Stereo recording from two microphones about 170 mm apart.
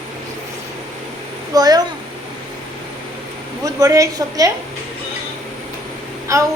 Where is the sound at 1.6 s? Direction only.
25° right (ahead or behind).